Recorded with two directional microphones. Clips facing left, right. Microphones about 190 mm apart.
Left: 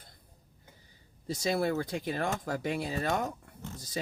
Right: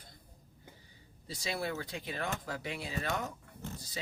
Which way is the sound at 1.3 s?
45° left (ahead or behind).